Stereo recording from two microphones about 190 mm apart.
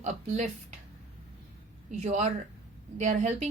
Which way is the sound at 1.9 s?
35° right (ahead or behind).